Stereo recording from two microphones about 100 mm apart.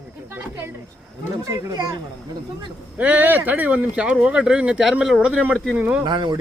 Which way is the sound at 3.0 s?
15° right (ahead or behind).